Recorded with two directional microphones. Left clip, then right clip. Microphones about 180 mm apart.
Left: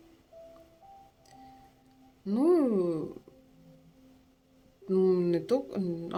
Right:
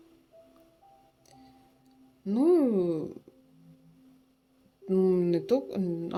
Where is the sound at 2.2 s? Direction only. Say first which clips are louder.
Right 1 dB; 25° right (ahead or behind).